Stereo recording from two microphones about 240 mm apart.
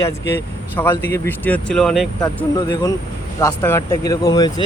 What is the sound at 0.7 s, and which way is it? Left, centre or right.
Speech, centre.